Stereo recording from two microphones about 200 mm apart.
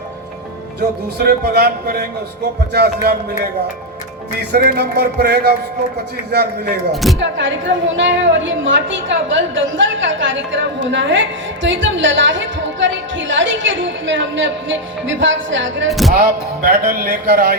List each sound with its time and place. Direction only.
0.8 s speech: 50° right (ahead or behind)
4.4 s speech: 50° right (ahead or behind)
6.9 s speech: centre (ahead or behind)
7.2 s a woman's voice: 65° right (ahead or behind)
15.9 s speech: centre (ahead or behind)
16.6 s speech: 45° right (ahead or behind)